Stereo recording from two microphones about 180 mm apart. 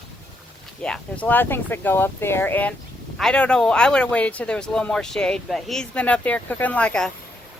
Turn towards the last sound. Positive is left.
turn(degrees=5)  # may be behind; listen again after turning